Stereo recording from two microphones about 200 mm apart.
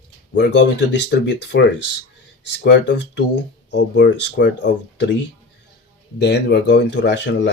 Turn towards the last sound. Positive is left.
turn(degrees=60)  # may be behind; listen again after turning